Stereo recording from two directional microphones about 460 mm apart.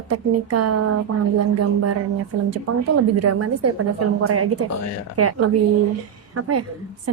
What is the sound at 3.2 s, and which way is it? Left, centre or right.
A woman's voice, right.